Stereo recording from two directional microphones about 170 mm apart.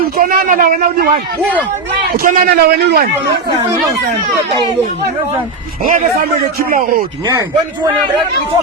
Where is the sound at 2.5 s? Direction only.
70° right (ahead or behind).